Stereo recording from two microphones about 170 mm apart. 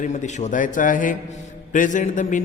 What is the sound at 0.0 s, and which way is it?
A man's voice, 45° left (ahead or behind).